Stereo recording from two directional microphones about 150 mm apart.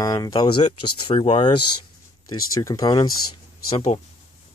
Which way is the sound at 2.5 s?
25° left (ahead or behind).